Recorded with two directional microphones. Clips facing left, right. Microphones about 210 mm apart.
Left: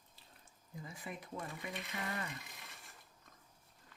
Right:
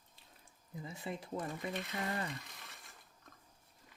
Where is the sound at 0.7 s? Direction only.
25° right (ahead or behind).